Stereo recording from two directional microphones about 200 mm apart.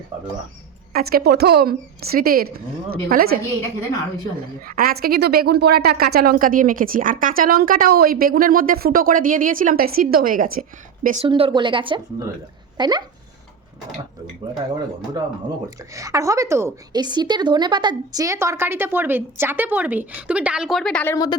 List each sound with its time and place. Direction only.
0.9 s speech: 50° right (ahead or behind)
4.6 s speech: 45° right (ahead or behind)
11.3 s speech: 25° right (ahead or behind)
15.9 s a woman's voice: 15° right (ahead or behind); by 21.3 s 15° left (ahead or behind)